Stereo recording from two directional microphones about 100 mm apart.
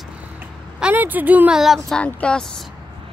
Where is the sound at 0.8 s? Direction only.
20° right (ahead or behind).